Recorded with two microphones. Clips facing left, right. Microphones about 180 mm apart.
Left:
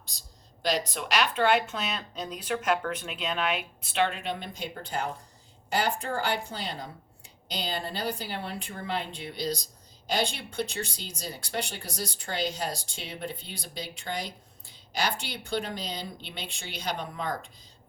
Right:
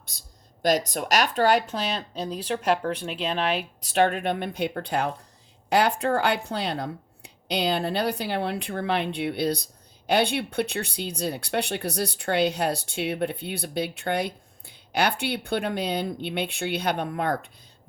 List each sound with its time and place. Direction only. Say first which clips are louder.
0.6 s speech: right 6 dB; 45° right (ahead or behind)
3.8 s speech: right 8 dB; 45° right (ahead or behind); by 17.5 s 60° right (ahead or behind)